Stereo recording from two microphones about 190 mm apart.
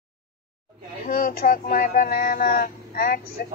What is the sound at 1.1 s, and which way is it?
Speech, 50° left (ahead or behind).